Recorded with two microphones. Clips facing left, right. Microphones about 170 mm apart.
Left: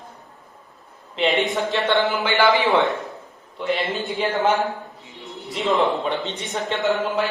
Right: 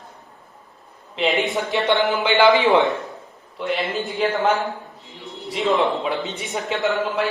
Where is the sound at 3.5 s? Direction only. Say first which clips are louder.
Even; centre (ahead or behind).